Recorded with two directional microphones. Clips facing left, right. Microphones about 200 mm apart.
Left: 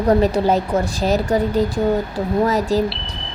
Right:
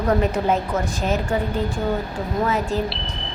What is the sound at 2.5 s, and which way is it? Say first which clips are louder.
Speech: left 5 dB; 40° left (ahead or behind).